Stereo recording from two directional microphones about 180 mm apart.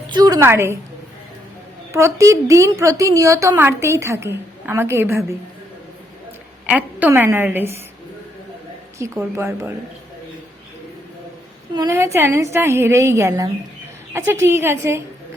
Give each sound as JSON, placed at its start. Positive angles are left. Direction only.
{"t": 0.1, "sound": "a woman's voice", "side_deg": -20}
{"t": 1.9, "sound": "a woman's voice", "side_deg": -15}
{"t": 6.7, "sound": "a woman's voice", "side_deg": -10}
{"t": 9.0, "sound": "a woman's voice", "side_deg": -15}
{"t": 11.7, "sound": "a woman's voice", "side_deg": -25}